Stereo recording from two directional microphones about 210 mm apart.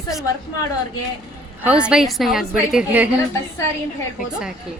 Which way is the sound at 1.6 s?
5° right (ahead or behind).